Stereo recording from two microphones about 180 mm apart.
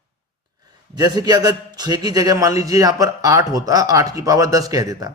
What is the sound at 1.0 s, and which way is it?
A man's voice, 20° right (ahead or behind).